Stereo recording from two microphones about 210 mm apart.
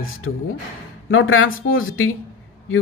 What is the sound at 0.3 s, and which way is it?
Speech, 70° left (ahead or behind).